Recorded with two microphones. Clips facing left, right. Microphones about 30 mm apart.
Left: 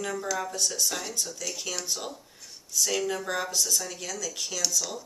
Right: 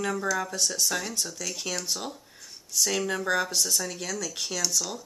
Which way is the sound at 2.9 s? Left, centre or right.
Right.